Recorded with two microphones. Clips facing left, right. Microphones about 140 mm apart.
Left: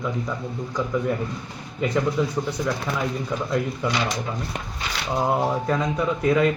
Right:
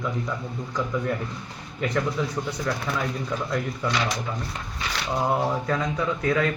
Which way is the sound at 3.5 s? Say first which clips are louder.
Left 3 dB; 10° left (ahead or behind).